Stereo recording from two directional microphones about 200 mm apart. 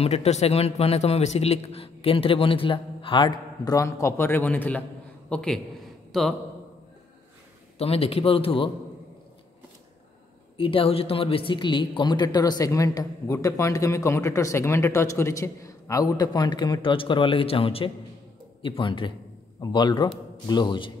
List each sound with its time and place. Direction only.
0.0 s a man's voice: 30° left (ahead or behind); by 6.3 s centre (ahead or behind)
7.8 s speech: 30° left (ahead or behind)
10.6 s speech: 25° left (ahead or behind)